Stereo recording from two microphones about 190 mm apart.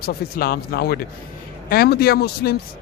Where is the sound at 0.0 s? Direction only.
55° left (ahead or behind).